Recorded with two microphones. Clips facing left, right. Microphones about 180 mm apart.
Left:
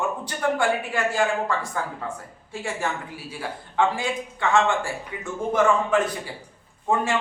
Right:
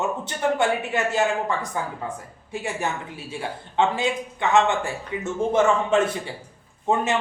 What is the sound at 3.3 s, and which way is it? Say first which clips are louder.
Speech: right 3 dB; 25° right (ahead or behind).